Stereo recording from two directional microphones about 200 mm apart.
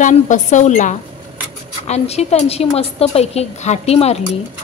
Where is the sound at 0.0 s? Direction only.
40° left (ahead or behind).